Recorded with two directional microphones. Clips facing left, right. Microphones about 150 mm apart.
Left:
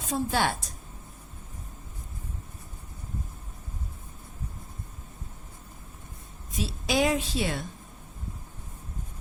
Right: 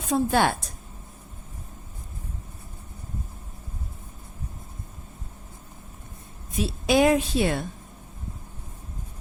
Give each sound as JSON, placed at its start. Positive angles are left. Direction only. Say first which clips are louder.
{"t": 0.1, "sound": "a woman's voice", "louder": "right 5 dB", "side_deg": -55}
{"t": 6.6, "sound": "a woman's voice", "louder": "right 6 dB", "side_deg": -55}